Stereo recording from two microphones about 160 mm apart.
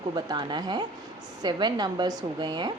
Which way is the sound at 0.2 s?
25° right (ahead or behind).